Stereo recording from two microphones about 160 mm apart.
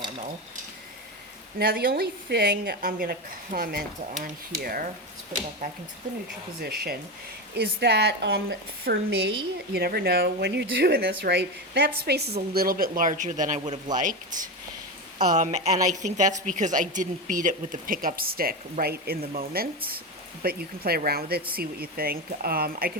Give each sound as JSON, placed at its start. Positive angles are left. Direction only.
{"t": 1.5, "sound": "speech", "side_deg": -70}
{"t": 6.6, "sound": "speech", "side_deg": -75}
{"t": 7.5, "sound": "a woman's voice", "side_deg": -90}